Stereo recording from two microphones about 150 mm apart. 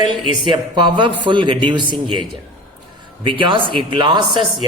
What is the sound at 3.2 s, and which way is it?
Speech, 35° right (ahead or behind).